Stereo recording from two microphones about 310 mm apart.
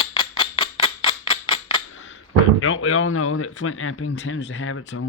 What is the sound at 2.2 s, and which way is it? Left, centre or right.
Speech, left.